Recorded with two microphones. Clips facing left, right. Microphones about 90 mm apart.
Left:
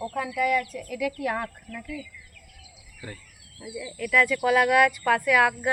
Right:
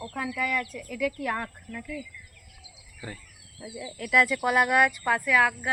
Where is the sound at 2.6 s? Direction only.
20° right (ahead or behind).